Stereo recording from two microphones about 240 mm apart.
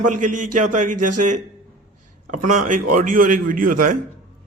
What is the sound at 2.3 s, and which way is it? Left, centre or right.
A man's voice, right.